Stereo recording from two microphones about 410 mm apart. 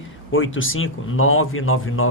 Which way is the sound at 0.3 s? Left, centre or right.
Left.